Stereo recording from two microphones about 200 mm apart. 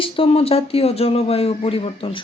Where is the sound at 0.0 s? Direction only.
30° left (ahead or behind).